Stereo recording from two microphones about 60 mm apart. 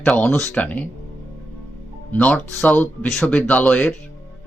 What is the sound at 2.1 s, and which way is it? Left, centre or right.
A man's voice, left.